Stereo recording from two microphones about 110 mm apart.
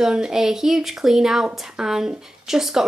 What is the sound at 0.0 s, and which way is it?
Speech, 5° right (ahead or behind).